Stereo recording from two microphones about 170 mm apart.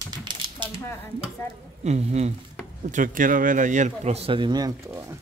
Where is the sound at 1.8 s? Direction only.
40° right (ahead or behind).